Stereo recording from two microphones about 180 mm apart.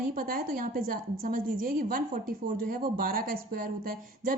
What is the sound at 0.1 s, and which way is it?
Speech, 50° right (ahead or behind).